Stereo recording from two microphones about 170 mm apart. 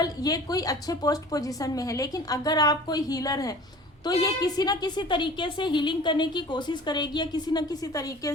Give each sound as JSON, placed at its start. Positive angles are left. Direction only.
{"t": 0.0, "sound": "a woman's voice", "side_deg": 20}